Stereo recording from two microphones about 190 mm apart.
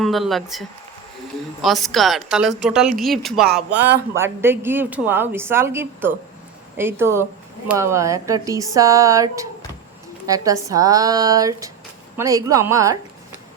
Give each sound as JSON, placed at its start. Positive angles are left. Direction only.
{"t": 0.0, "sound": "a woman's voice", "side_deg": 0}
{"t": 1.6, "sound": "a woman's voice", "side_deg": 0}
{"t": 3.8, "sound": "a woman's voice", "side_deg": -10}